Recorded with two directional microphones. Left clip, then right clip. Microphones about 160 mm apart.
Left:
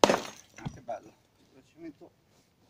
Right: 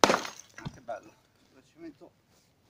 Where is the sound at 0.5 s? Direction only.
15° left (ahead or behind).